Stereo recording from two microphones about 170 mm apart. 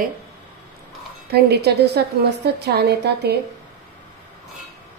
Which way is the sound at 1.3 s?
70° right (ahead or behind).